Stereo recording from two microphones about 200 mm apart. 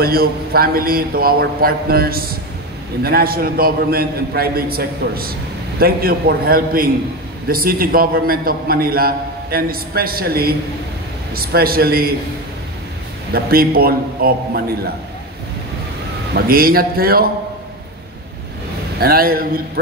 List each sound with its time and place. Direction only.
0.0 s a man's voice: 50° right (ahead or behind)
13.3 s a man's voice: 50° right (ahead or behind)
16.3 s a man's voice: 50° right (ahead or behind)
18.9 s a man's voice: 50° right (ahead or behind)